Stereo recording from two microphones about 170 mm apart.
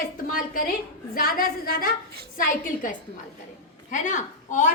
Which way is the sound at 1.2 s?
60° left (ahead or behind).